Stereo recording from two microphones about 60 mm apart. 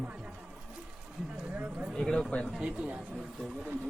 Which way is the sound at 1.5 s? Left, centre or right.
Right.